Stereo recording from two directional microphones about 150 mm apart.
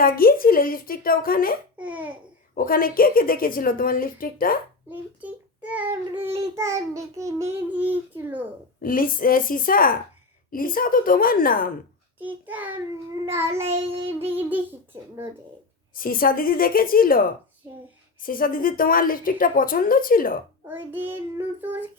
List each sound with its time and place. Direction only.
0.0 s speech: 75° left (ahead or behind)
1.8 s a child's voice: 10° right (ahead or behind)
2.6 s speech: 70° left (ahead or behind)
4.9 s a child's voice: 10° right (ahead or behind)
8.8 s speech: 70° left (ahead or behind)
12.2 s a child's voice: 10° right (ahead or behind)
13.8 s child singing: 40° right (ahead or behind)
14.3 s a child's voice: 15° right (ahead or behind)
16.0 s speech: 70° left (ahead or behind)
20.7 s a child's voice: 15° right (ahead or behind)